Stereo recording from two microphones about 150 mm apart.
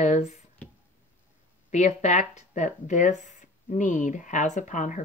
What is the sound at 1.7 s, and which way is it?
Speech, 50° left (ahead or behind).